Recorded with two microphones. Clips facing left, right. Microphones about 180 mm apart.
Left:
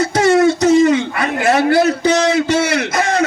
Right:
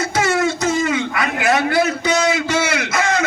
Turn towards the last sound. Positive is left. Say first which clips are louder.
# left 3 dB
turn(degrees=35)  # may be behind; listen again after turning